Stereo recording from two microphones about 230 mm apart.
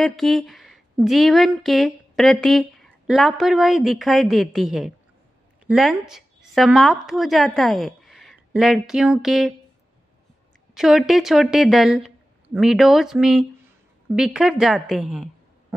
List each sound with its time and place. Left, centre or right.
0.0 s speech: centre
10.7 s a woman's voice: centre